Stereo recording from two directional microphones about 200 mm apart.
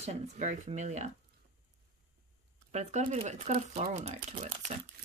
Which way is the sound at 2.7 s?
35° right (ahead or behind).